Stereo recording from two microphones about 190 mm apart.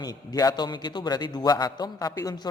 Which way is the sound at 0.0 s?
20° left (ahead or behind).